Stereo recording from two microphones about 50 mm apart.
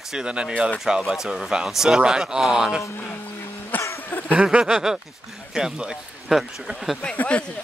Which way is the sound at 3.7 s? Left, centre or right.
Left.